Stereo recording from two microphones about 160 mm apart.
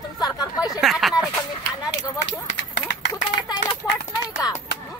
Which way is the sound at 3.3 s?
30° left (ahead or behind).